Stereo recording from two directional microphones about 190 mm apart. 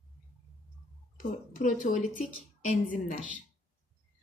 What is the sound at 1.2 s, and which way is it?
Speech, 45° left (ahead or behind).